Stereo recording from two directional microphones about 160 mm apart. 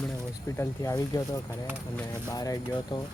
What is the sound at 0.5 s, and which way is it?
Speech, 20° left (ahead or behind).